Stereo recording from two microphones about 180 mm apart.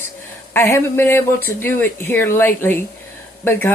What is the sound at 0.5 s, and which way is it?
A woman's voice, 15° left (ahead or behind).